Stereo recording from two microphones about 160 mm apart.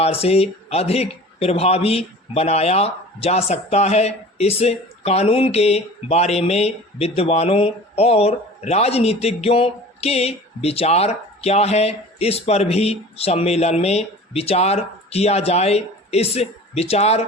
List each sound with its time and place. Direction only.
0.0 s a man's voice: 40° left (ahead or behind)